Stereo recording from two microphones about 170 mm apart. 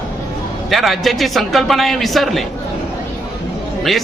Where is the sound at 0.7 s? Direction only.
Centre (ahead or behind).